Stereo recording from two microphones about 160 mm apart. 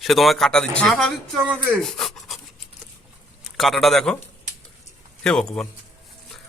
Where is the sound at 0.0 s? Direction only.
Centre (ahead or behind).